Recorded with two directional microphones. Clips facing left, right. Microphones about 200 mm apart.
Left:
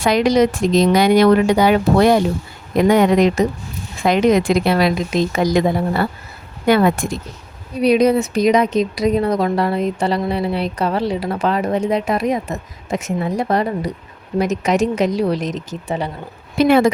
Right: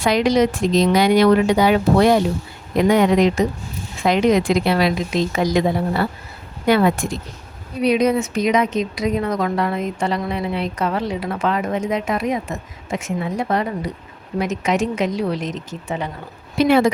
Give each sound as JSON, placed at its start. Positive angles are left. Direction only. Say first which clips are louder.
{"t": 0.0, "sound": "speech", "louder": "left 2 dB", "side_deg": 45}
{"t": 7.8, "sound": "a woman's voice", "louder": "left 3 dB", "side_deg": 35}
{"t": 16.6, "sound": "speech", "louder": "left 2 dB", "side_deg": 50}